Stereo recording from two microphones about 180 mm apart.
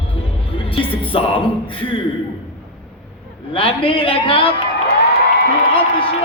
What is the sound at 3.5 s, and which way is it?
A man's voice, 30° left (ahead or behind).